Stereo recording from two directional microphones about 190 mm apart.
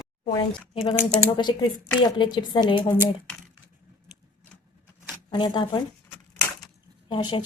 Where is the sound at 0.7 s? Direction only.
30° left (ahead or behind).